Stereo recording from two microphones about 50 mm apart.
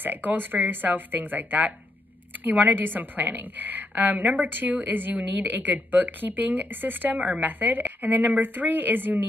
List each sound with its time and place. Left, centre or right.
0.0 s a woman's voice: right